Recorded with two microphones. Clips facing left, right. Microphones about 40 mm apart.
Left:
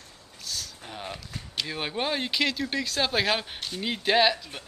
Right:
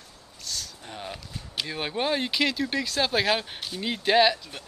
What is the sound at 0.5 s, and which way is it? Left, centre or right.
Speech, centre.